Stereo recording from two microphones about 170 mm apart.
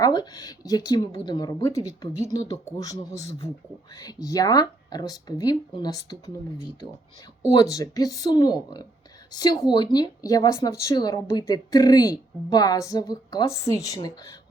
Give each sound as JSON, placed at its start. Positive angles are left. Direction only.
{"t": 0.0, "sound": "speech", "side_deg": 25}
{"t": 7.5, "sound": "speech", "side_deg": 20}